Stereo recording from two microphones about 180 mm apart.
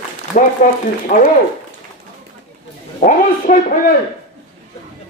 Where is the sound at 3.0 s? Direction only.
45° left (ahead or behind).